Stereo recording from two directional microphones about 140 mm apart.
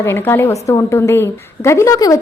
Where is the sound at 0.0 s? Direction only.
15° left (ahead or behind).